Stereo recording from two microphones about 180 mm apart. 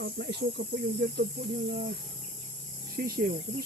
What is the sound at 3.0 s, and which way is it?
Speech, 55° right (ahead or behind).